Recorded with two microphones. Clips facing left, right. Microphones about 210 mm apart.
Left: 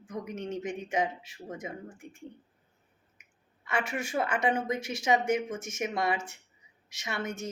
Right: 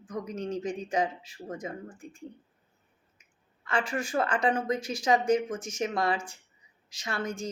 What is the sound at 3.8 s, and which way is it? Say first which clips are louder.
Speech: right 2 dB; 25° left (ahead or behind).